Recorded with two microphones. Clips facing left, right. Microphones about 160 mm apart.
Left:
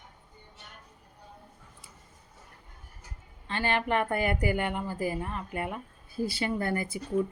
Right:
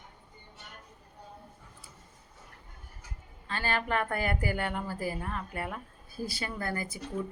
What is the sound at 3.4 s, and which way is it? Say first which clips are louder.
A woman's voice: left 3 dB; 20° left (ahead or behind).